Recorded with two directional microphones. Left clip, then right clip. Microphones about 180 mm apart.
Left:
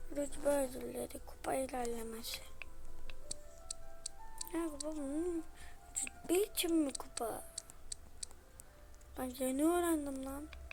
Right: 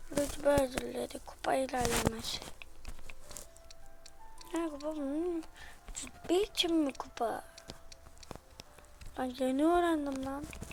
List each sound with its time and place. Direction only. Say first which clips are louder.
0.1 s a woman's voice: right 6 dB; 10° right (ahead or behind)
3.7 s music: left 5 dB; 60° left (ahead or behind)
4.5 s a woman's voice: right 4 dB; 5° right (ahead or behind)
8.2 s a sound: right 4 dB; 60° left (ahead or behind)
9.1 s speech: right 5 dB; 5° right (ahead or behind)